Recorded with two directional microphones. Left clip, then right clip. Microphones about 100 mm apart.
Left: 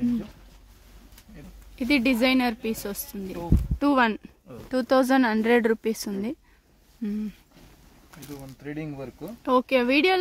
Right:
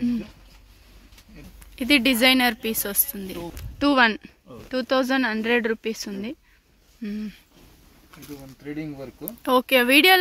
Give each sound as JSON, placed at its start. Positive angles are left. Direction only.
{"t": 1.8, "sound": "speech", "side_deg": 0}
{"t": 4.6, "sound": "speech", "side_deg": 25}
{"t": 8.6, "sound": "speech", "side_deg": 20}
{"t": 9.4, "sound": "speech", "side_deg": 0}